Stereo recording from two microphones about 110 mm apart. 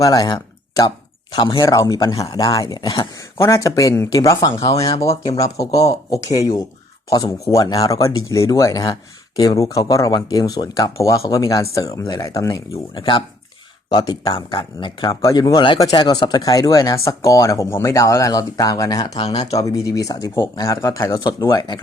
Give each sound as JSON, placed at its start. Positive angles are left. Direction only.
{"t": 0.0, "sound": "speech", "side_deg": 35}
{"t": 1.6, "sound": "speech", "side_deg": 30}
{"t": 12.9, "sound": "speech", "side_deg": 50}
{"t": 15.1, "sound": "speech", "side_deg": 35}
{"t": 19.1, "sound": "speech", "side_deg": 70}
{"t": 19.5, "sound": "speech", "side_deg": 30}
{"t": 21.2, "sound": "speech", "side_deg": 40}